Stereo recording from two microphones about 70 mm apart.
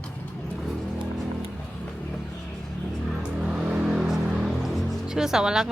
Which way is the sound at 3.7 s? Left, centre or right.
Centre.